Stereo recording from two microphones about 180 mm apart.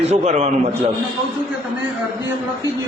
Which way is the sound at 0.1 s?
40° right (ahead or behind).